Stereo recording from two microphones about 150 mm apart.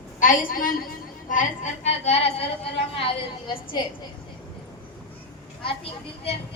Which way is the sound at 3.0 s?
30° left (ahead or behind).